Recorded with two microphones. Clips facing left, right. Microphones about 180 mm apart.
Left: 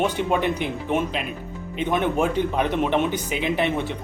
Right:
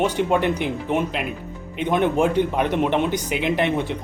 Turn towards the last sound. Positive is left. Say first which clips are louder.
# right 2 dB
turn(degrees=-15)  # may be behind; listen again after turning